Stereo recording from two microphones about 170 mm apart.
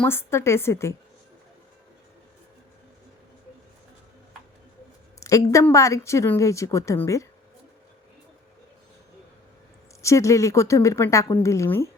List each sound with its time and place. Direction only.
0.0 s speech: 15° left (ahead or behind)
5.2 s speech: 20° left (ahead or behind)
10.0 s speech: 15° left (ahead or behind)